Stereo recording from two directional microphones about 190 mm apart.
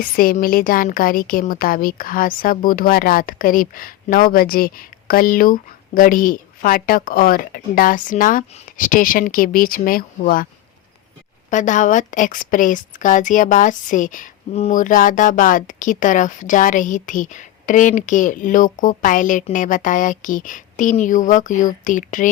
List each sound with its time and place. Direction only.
0.0 s a woman's voice: 50° left (ahead or behind)
11.5 s a woman's voice: 40° left (ahead or behind)